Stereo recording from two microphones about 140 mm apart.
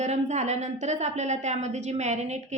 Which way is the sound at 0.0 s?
55° right (ahead or behind).